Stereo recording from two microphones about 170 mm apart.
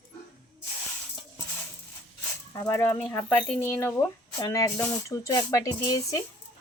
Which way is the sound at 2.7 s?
10° left (ahead or behind).